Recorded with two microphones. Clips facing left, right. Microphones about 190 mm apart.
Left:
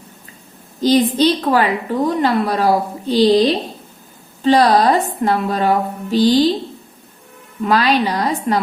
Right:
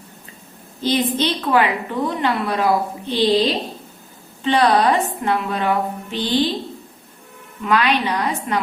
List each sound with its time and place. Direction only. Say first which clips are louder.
0.8 s a woman's voice: left 6 dB; 35° left (ahead or behind)
7.6 s a woman's voice: left 3 dB; 35° left (ahead or behind)